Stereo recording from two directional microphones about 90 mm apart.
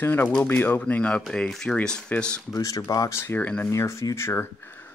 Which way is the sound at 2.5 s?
40° left (ahead or behind).